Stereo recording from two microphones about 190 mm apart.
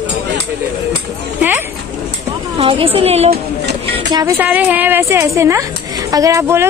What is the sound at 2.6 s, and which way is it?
Speech, 30° right (ahead or behind).